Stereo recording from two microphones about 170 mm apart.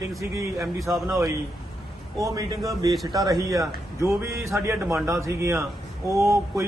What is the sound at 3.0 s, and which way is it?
A man's voice, 20° right (ahead or behind).